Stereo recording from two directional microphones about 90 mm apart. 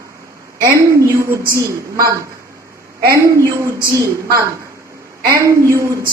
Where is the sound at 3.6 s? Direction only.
35° right (ahead or behind).